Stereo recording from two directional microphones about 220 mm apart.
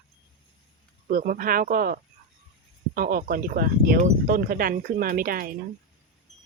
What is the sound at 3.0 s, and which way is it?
Speech, 40° right (ahead or behind).